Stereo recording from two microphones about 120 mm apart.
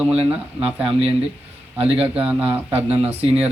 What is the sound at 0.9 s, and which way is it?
Speech, 55° right (ahead or behind).